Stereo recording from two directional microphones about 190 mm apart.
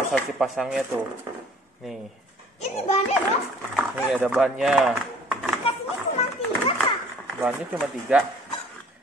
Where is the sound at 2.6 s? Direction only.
30° left (ahead or behind).